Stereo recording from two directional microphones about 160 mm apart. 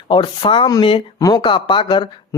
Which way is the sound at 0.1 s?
30° left (ahead or behind).